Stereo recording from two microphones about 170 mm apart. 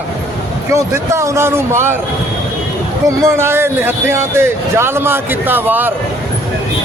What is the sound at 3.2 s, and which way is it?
Speech, 15° right (ahead or behind).